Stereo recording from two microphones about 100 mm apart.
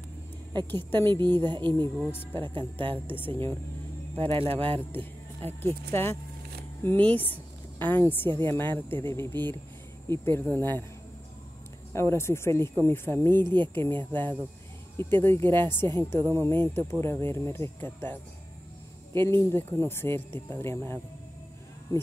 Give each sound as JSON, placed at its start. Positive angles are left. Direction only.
{"t": 0.7, "sound": "speech", "side_deg": 20}
{"t": 1.4, "sound": "speech", "side_deg": -50}
{"t": 2.4, "sound": "music", "side_deg": -55}
{"t": 3.1, "sound": "speech", "side_deg": 20}
{"t": 4.2, "sound": "speech", "side_deg": -70}
{"t": 4.6, "sound": "music", "side_deg": -65}
{"t": 5.4, "sound": "speech", "side_deg": 25}
{"t": 11.9, "sound": "speech", "side_deg": 30}